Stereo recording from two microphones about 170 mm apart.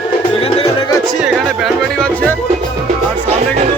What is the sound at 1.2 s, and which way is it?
Music, centre (ahead or behind).